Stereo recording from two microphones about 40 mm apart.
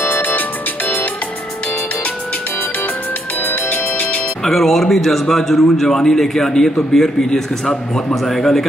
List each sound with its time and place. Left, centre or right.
0.0 s music: left
3.4 s music: left
4.5 s a man's voice: centre